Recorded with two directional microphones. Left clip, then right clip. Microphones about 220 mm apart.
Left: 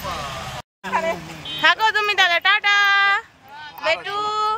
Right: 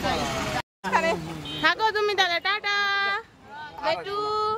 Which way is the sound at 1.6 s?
Centre (ahead or behind).